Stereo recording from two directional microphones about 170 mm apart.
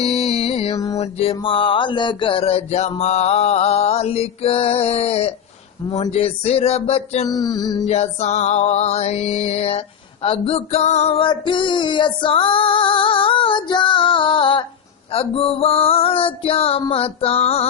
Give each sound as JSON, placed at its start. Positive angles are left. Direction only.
{"t": 0.0, "sound": "music", "side_deg": 35}
{"t": 7.3, "sound": "music", "side_deg": 25}
{"t": 7.9, "sound": "music", "side_deg": 40}